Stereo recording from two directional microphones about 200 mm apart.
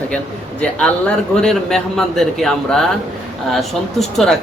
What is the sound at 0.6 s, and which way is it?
A man's voice, 5° left (ahead or behind).